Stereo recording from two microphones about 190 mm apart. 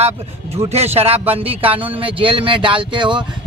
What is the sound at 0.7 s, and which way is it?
A man's voice, 35° right (ahead or behind).